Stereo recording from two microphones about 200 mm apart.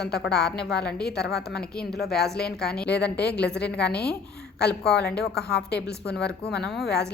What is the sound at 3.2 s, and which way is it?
Speech, 55° left (ahead or behind).